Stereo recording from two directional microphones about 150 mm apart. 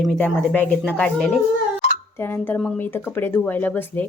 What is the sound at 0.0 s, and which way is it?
Speech, 5° left (ahead or behind).